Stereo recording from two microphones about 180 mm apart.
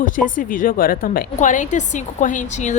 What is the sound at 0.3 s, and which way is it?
A woman's voice, 50° left (ahead or behind).